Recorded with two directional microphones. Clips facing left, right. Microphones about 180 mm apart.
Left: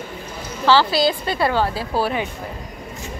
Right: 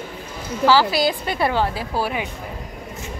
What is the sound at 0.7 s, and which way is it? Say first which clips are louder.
A woman's voice: left 1 dB; 10° right (ahead or behind).